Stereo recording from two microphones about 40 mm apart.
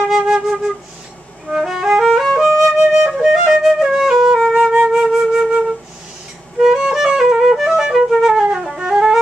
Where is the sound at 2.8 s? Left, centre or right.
Right.